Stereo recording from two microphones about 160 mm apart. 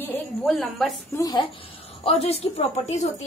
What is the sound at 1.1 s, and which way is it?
Speech, 25° left (ahead or behind).